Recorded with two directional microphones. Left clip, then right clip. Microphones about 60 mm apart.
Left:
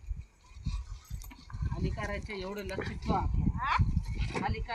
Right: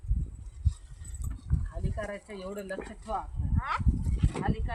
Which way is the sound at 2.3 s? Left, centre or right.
Right.